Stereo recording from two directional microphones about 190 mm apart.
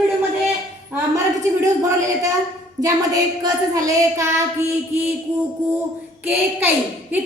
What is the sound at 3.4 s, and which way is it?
A woman's voice, 20° right (ahead or behind).